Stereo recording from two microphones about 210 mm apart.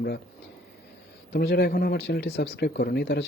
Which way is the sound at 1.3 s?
50° left (ahead or behind).